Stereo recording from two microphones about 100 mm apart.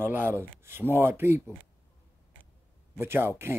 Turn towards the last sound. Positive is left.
turn(degrees=-25)  # may be behind; listen again after turning